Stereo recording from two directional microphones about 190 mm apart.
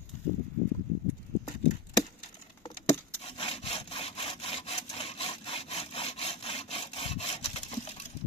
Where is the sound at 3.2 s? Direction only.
30° left (ahead or behind).